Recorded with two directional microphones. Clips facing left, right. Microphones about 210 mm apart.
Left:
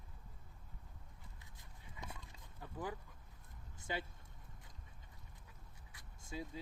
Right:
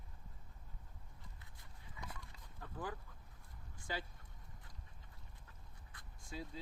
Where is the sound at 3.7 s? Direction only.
20° left (ahead or behind).